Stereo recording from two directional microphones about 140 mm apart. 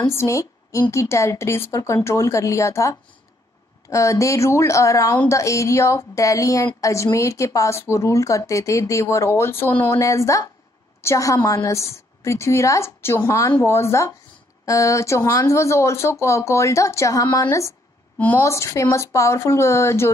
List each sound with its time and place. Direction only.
0.0 s a woman's voice: 20° left (ahead or behind)